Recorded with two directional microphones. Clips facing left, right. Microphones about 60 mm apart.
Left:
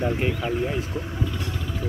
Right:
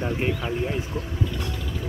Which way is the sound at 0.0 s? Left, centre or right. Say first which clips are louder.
Left 1 dB; centre.